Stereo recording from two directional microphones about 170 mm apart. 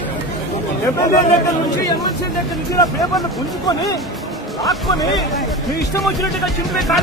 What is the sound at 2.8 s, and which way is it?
Speech, 20° left (ahead or behind).